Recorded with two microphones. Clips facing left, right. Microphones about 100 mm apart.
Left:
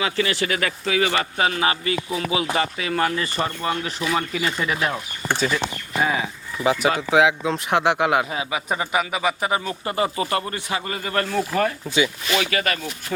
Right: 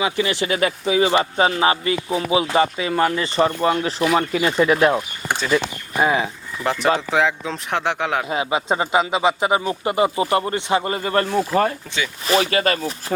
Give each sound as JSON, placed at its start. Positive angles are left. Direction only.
{"t": 0.0, "sound": "speech", "side_deg": -20}
{"t": 6.6, "sound": "speech", "side_deg": 5}
{"t": 8.3, "sound": "speech", "side_deg": -25}